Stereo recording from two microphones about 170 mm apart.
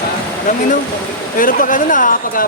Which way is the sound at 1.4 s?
55° left (ahead or behind).